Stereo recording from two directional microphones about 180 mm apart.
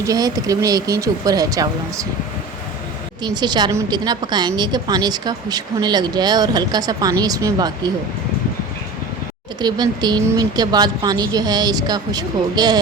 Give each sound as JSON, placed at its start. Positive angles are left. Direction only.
{"t": 0.0, "sound": "a woman's voice", "side_deg": -20}
{"t": 3.2, "sound": "a woman's voice", "side_deg": -25}
{"t": 9.6, "sound": "a woman's voice", "side_deg": -25}